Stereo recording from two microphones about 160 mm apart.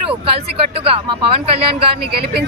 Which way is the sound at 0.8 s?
35° right (ahead or behind).